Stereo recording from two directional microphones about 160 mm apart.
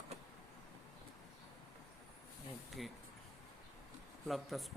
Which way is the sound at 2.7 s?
Centre (ahead or behind).